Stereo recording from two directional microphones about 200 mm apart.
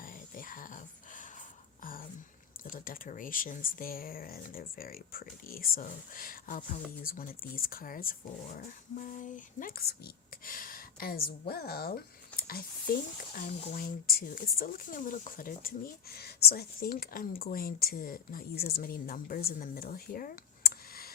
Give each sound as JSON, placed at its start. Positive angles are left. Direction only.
{"t": 0.0, "sound": "dog", "side_deg": 45}
{"t": 1.8, "sound": "whispering", "side_deg": 45}
{"t": 2.6, "sound": "speech", "side_deg": 45}